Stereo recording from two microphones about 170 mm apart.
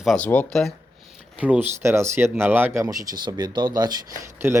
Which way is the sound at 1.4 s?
10° right (ahead or behind).